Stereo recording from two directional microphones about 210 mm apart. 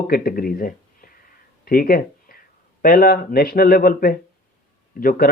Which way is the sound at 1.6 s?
45° left (ahead or behind).